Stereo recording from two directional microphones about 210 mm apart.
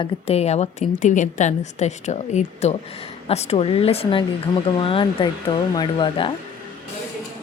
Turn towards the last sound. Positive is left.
turn(degrees=25)  # may be behind; listen again after turning